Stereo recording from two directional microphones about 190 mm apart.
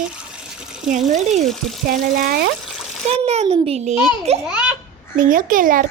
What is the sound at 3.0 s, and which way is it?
Speech, 35° right (ahead or behind).